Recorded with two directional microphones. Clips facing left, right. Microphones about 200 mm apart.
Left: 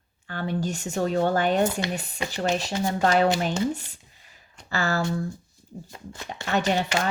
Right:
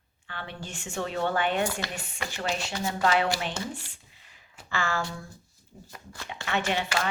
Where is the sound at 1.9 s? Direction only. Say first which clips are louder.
Left 6 dB; 35° left (ahead or behind).